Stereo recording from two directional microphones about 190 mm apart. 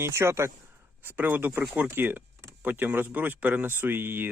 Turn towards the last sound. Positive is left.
turn(degrees=-10)  # may be behind; listen again after turning